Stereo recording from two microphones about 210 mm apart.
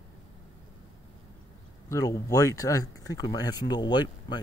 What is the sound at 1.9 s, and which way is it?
Speech, 15° left (ahead or behind).